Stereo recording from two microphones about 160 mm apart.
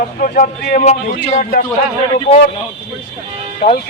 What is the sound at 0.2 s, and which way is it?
A man's voice, 60° left (ahead or behind).